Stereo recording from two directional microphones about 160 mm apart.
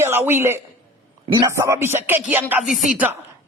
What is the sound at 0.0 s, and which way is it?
A woman's voice, 15° right (ahead or behind).